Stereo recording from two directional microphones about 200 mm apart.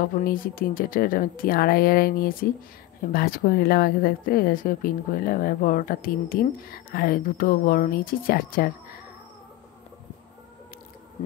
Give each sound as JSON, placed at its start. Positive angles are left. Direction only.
{"t": 0.0, "sound": "speech", "side_deg": 45}